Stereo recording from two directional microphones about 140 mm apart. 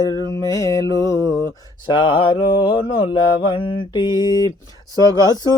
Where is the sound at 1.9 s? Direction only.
35° left (ahead or behind).